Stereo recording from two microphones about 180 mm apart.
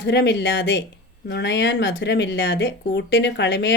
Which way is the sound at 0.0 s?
75° left (ahead or behind).